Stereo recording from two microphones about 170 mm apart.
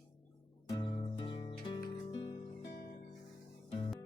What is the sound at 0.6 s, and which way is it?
Music, 30° left (ahead or behind).